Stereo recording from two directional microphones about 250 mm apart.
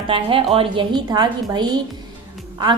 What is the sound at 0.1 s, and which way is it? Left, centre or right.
A woman's voice, right.